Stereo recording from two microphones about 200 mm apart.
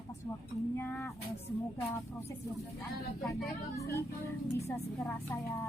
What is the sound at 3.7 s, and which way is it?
Speech, 15° left (ahead or behind).